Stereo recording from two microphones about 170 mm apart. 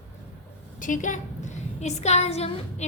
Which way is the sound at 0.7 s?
50° left (ahead or behind).